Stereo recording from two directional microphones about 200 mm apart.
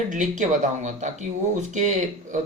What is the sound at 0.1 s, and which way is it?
Speech, 40° right (ahead or behind).